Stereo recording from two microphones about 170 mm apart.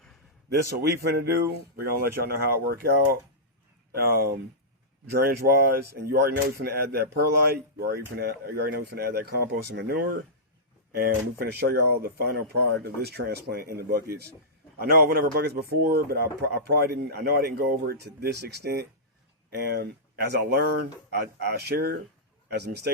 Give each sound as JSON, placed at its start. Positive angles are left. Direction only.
{"t": 0.8, "sound": "speech", "side_deg": -70}
{"t": 11.0, "sound": "speech", "side_deg": -65}